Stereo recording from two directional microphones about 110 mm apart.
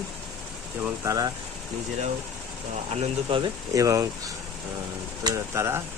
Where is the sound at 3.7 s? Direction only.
30° right (ahead or behind).